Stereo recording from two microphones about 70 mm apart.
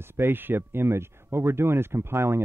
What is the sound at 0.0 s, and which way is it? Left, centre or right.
Speech, right.